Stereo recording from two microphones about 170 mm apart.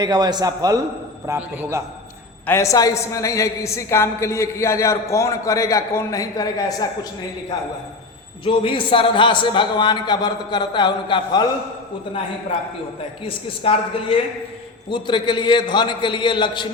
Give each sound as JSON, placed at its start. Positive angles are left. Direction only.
{"t": 0.0, "sound": "a man's voice", "side_deg": -25}
{"t": 2.5, "sound": "a woman's voice", "side_deg": 15}
{"t": 8.4, "sound": "a man's voice", "side_deg": 30}
{"t": 13.2, "sound": "a woman's voice", "side_deg": 35}